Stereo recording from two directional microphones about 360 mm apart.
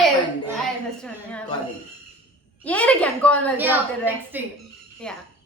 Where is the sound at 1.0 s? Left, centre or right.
Centre.